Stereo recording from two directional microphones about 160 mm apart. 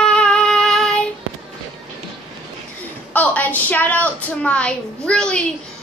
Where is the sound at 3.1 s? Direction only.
10° left (ahead or behind).